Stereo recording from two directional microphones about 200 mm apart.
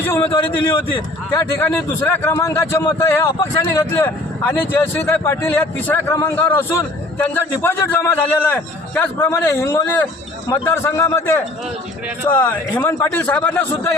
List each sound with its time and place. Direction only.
0.2 s a man's voice: 25° left (ahead or behind)
1.3 s speech: 10° left (ahead or behind)